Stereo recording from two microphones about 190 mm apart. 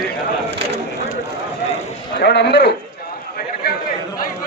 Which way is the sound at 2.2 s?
60° left (ahead or behind).